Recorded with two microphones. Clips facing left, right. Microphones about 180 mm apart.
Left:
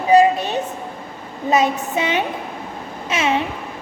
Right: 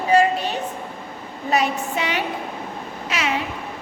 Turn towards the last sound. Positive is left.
turn(degrees=25)  # may be behind; listen again after turning